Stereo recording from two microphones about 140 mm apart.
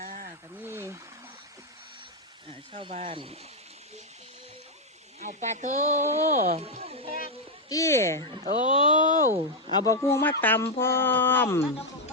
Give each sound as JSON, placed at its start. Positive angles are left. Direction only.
{"t": 0.5, "sound": "a sound", "side_deg": -15}
{"t": 2.5, "sound": "speech", "side_deg": -40}
{"t": 5.2, "sound": "speech", "side_deg": -55}
{"t": 7.7, "sound": "speech", "side_deg": 20}
{"t": 8.7, "sound": "speech", "side_deg": 35}
{"t": 9.7, "sound": "speech", "side_deg": 25}
{"t": 11.6, "sound": "speech", "side_deg": 45}